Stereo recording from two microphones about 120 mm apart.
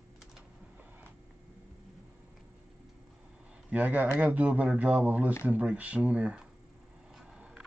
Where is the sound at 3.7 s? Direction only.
15° right (ahead or behind).